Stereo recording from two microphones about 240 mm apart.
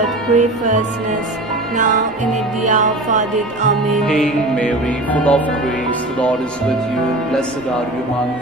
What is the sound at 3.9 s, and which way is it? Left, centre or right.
Music, centre.